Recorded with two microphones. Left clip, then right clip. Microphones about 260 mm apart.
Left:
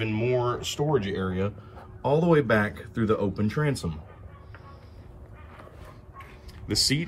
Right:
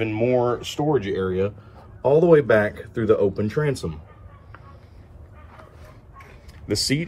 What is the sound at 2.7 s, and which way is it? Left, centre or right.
Speech, right.